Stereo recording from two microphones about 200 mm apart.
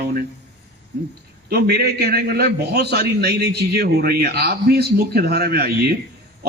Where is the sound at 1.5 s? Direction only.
55° right (ahead or behind).